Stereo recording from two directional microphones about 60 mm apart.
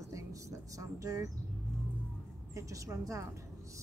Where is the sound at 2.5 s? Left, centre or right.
Right.